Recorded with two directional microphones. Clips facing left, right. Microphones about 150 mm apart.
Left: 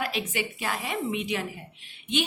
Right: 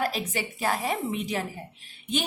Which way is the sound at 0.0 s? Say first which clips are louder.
Right 1 dB; 40° right (ahead or behind).